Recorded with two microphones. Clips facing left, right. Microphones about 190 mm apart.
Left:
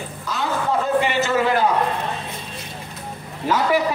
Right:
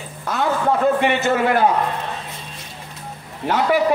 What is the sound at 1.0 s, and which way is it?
Speech, 55° right (ahead or behind).